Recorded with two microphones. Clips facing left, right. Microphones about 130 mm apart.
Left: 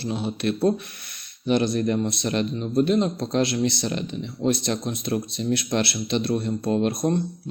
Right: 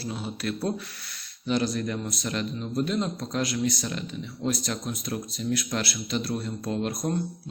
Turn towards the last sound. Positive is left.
turn(degrees=25)  # may be behind; listen again after turning